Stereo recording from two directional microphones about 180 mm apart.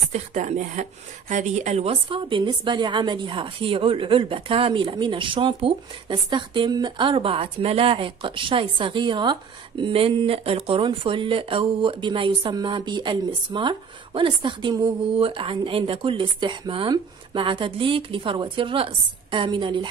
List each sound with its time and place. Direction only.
0.1 s a woman's voice: 40° right (ahead or behind); by 19.9 s 25° right (ahead or behind)